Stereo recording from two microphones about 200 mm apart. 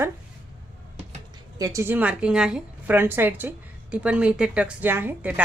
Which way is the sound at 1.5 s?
15° right (ahead or behind).